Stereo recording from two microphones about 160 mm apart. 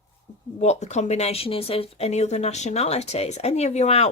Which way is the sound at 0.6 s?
45° left (ahead or behind).